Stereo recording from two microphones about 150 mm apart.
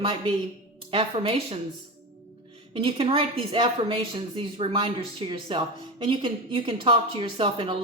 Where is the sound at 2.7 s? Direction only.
40° right (ahead or behind).